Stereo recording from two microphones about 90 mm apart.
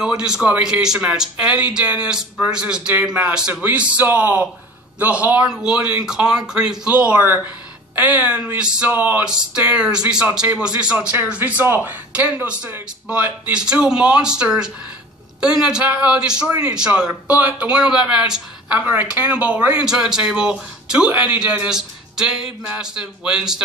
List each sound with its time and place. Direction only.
0.0 s speech: 10° right (ahead or behind)
9.3 s speech: 10° right (ahead or behind)
13.5 s speech: 10° right (ahead or behind)
18.8 s speech: 20° right (ahead or behind)